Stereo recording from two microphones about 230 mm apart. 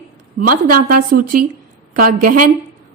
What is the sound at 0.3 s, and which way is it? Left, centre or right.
A woman's voice, right.